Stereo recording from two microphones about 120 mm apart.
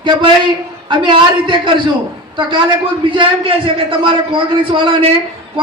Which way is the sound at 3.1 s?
45° right (ahead or behind).